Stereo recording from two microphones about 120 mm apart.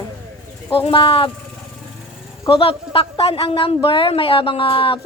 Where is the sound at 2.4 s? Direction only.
50° left (ahead or behind).